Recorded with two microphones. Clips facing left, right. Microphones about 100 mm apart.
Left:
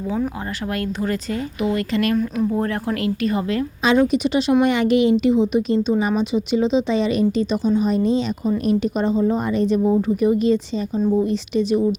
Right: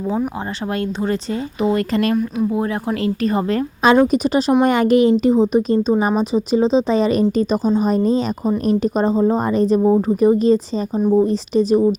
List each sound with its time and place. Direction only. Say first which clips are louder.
1.7 s speech: right 2 dB; 35° right (ahead or behind)
2.1 s speech: right 1 dB; 10° right (ahead or behind)
3.0 s speech: right 4 dB; 35° right (ahead or behind)